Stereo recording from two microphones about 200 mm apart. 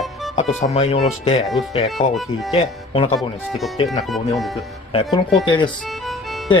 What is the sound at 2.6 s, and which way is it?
Speech, 30° left (ahead or behind).